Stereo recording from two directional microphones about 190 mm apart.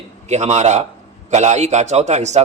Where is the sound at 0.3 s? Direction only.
35° right (ahead or behind).